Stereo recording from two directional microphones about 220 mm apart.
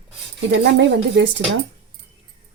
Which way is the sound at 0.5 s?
50° right (ahead or behind).